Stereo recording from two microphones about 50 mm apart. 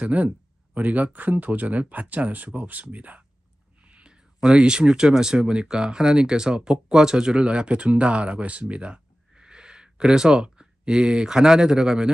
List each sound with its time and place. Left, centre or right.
0.0 s speech: right
3.8 s whispering: right
4.4 s speech: centre